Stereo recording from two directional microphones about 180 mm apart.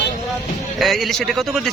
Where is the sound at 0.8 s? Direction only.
Centre (ahead or behind).